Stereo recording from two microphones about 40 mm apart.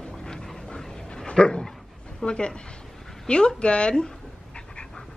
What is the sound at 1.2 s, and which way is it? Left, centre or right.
Dog, left.